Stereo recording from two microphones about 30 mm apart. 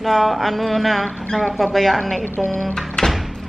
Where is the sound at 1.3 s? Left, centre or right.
Left.